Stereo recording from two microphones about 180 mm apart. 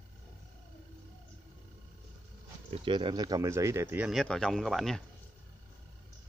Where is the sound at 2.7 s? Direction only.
25° right (ahead or behind); by 4.1 s 10° right (ahead or behind).